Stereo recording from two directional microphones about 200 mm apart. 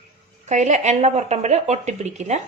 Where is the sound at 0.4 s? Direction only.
35° right (ahead or behind).